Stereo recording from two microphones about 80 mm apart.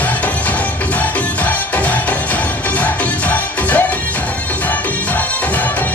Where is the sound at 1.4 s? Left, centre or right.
Centre.